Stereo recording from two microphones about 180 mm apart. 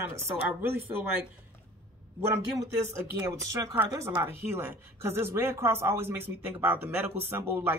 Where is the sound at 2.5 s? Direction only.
20° right (ahead or behind).